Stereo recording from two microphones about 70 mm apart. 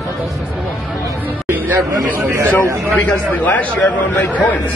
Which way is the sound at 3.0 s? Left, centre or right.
Left.